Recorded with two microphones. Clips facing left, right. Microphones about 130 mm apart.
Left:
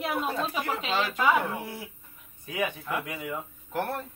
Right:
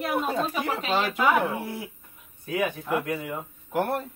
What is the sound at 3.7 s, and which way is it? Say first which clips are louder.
Speech: right 5 dB; 15° right (ahead or behind).